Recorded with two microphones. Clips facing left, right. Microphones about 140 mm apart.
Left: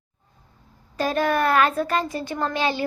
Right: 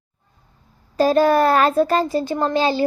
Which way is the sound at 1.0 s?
35° right (ahead or behind).